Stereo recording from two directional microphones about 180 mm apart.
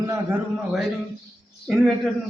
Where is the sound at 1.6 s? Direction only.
Centre (ahead or behind).